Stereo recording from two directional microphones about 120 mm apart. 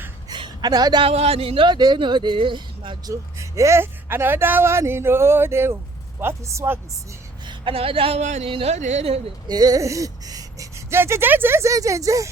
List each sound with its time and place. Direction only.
0.3 s a sound: 40° right (ahead or behind)
1.0 s speech: 55° right (ahead or behind)
3.1 s speech: 25° right (ahead or behind)
7.4 s speech: 45° right (ahead or behind)
8.2 s speech: 80° right
8.4 s speech: 45° right (ahead or behind)
8.7 s speech: 70° right (ahead or behind)
9.5 s speech: 35° right (ahead or behind)